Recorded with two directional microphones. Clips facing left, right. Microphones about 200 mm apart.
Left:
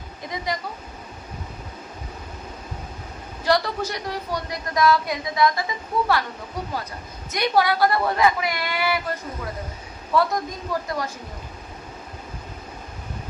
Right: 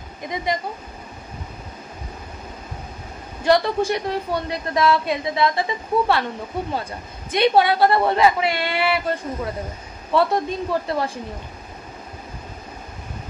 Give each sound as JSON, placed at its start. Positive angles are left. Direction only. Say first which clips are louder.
{"t": 3.4, "sound": "a woman's voice", "louder": "right 5 dB", "side_deg": -25}
{"t": 7.3, "sound": "a woman's voice", "louder": "right 4 dB", "side_deg": -25}